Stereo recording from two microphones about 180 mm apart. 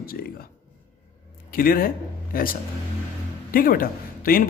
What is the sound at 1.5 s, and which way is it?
A man's voice, 55° left (ahead or behind).